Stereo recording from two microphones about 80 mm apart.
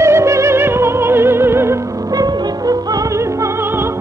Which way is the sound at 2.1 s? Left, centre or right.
Right.